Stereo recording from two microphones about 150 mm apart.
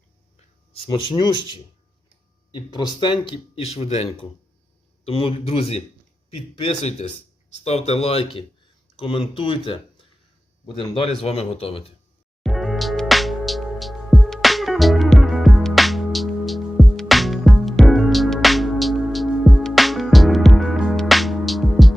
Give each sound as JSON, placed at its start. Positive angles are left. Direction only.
{"t": 0.7, "sound": "speech", "side_deg": 35}
{"t": 12.4, "sound": "music", "side_deg": 0}